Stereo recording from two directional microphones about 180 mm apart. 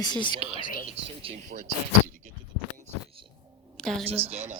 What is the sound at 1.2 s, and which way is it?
Speech, 30° right (ahead or behind).